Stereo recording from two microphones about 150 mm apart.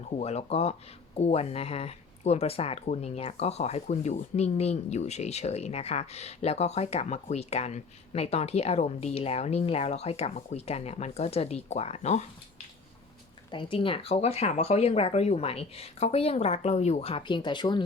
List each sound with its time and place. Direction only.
0.2 s speech: 45° left (ahead or behind)
13.5 s speech: 35° left (ahead or behind)